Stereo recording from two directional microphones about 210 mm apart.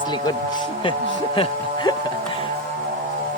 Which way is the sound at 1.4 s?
20° left (ahead or behind).